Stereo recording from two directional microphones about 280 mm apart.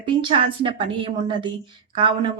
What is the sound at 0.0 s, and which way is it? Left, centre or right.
Speech, centre.